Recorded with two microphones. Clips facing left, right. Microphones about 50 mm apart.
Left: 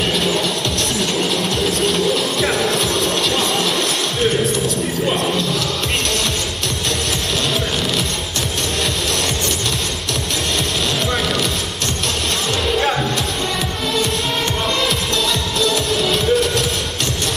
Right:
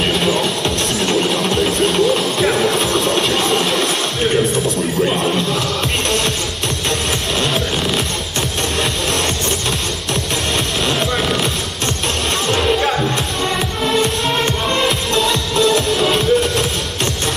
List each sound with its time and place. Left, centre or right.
0.1 s music: centre
1.1 s a sound: centre
5.0 s wild animals: centre
12.7 s music: centre
14.8 s music: centre